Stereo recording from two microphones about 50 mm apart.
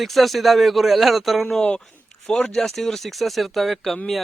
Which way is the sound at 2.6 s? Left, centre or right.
Centre.